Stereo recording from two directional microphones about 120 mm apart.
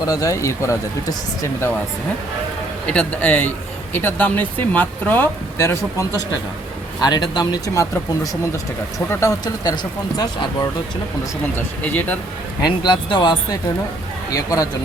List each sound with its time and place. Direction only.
0.0 s speech: 30° left (ahead or behind)
2.8 s speech: 10° left (ahead or behind); by 6.2 s 25° left (ahead or behind)
7.0 s speech: 35° left (ahead or behind)
11.5 s speech: 15° left (ahead or behind)
12.6 s speech: 40° left (ahead or behind)